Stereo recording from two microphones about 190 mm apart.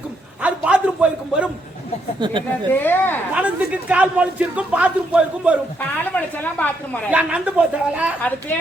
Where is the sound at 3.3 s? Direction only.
5° right (ahead or behind).